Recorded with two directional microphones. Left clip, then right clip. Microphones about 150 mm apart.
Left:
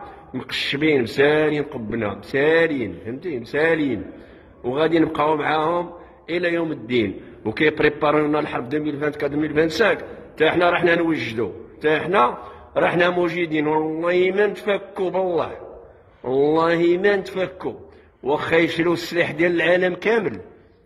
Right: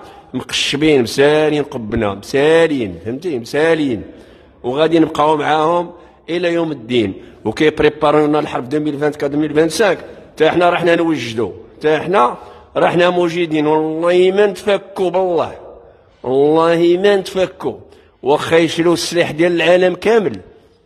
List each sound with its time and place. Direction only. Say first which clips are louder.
0.3 s a man's voice: right 7 dB; 35° right (ahead or behind)